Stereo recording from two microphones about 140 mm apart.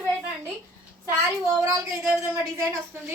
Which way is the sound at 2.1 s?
20° right (ahead or behind).